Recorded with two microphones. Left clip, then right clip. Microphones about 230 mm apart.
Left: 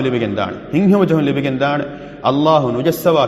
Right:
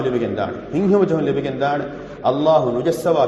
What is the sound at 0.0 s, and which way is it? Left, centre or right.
A man's voice, left.